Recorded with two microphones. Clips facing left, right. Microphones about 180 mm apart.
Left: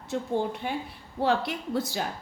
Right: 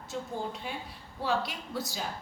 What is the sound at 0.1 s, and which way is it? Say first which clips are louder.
A woman's voice: left 8 dB; 60° left (ahead or behind).